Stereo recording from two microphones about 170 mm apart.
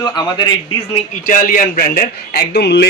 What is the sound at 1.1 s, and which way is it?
A man's voice, 55° left (ahead or behind).